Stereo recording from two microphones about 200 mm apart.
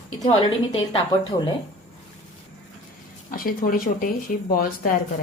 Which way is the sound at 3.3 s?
45° left (ahead or behind).